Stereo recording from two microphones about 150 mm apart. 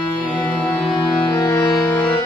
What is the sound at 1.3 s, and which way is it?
Music, 20° left (ahead or behind).